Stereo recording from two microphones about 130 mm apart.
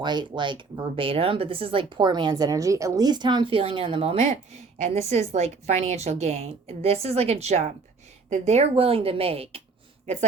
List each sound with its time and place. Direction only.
0.0 s a woman's voice: 35° right (ahead or behind)
4.8 s a woman's voice: 55° right (ahead or behind)